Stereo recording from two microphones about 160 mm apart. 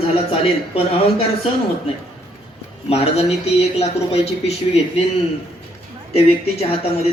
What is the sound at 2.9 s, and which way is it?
Speech, 40° left (ahead or behind).